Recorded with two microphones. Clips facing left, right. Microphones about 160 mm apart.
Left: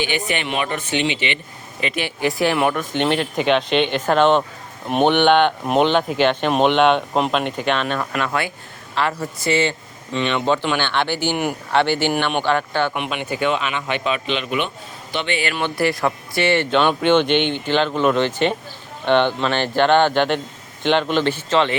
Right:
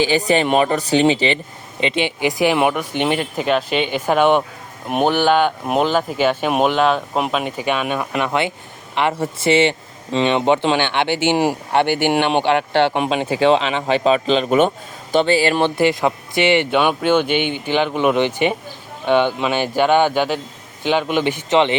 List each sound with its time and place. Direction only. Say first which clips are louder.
0.0 s speech: right 7 dB; 35° right (ahead or behind)
1.8 s a man's voice: right 3 dB; 25° right (ahead or behind)